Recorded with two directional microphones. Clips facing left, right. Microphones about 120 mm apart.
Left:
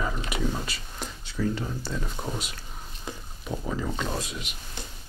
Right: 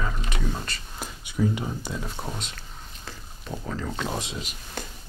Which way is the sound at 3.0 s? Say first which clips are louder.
Left 4 dB; 10° left (ahead or behind).